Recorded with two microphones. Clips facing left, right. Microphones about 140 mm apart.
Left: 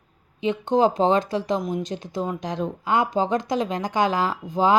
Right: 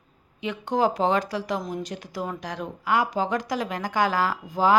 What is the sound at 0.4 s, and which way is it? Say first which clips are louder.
Speech: left 4 dB; 25° left (ahead or behind).